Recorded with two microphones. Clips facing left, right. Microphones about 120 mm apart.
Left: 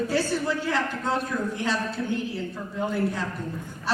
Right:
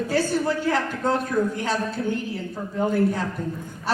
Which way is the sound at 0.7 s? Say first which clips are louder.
Right 3 dB; 45° right (ahead or behind).